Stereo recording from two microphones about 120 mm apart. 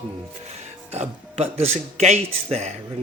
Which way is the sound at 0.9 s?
60° right (ahead or behind).